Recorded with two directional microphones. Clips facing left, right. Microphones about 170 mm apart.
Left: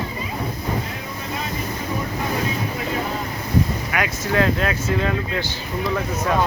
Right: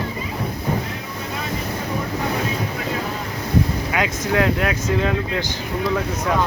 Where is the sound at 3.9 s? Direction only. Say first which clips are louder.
Right 1 dB; 20° right (ahead or behind).